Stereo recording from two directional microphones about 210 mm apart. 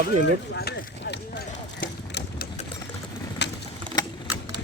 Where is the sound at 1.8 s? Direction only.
45° left (ahead or behind).